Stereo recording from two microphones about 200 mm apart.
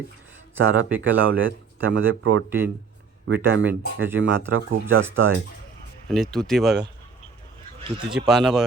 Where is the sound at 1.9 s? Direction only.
80° right.